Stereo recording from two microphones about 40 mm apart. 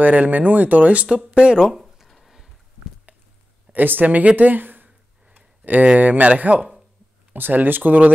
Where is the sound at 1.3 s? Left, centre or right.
Right.